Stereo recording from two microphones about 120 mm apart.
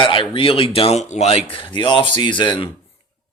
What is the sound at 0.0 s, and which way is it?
Speech, 45° left (ahead or behind).